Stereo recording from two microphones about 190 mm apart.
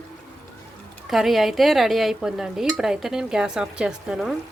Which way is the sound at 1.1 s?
Centre (ahead or behind).